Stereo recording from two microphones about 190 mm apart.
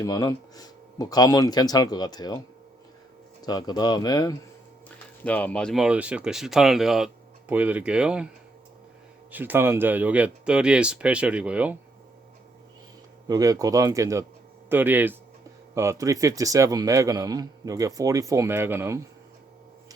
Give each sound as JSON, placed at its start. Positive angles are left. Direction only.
{"t": 0.0, "sound": "speech", "side_deg": 20}
{"t": 3.4, "sound": "speech", "side_deg": 20}
{"t": 5.2, "sound": "speech", "side_deg": 10}
{"t": 9.3, "sound": "speech", "side_deg": -10}
{"t": 13.2, "sound": "speech", "side_deg": -20}